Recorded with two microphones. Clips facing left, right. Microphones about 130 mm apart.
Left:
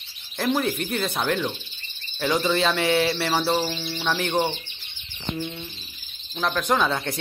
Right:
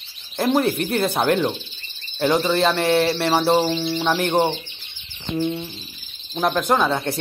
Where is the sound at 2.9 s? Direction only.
45° right (ahead or behind).